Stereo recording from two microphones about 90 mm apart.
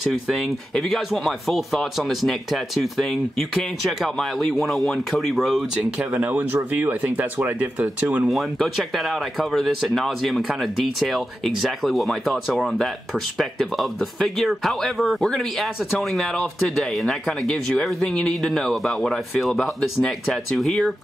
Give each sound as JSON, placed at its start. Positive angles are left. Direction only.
{"t": 0.0, "sound": "speech", "side_deg": 0}
{"t": 5.9, "sound": "speech", "side_deg": -15}
{"t": 8.3, "sound": "speech", "side_deg": 0}